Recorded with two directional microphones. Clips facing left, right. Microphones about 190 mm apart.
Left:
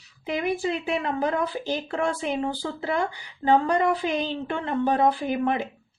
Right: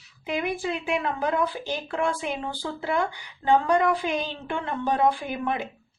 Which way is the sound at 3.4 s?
35° left (ahead or behind).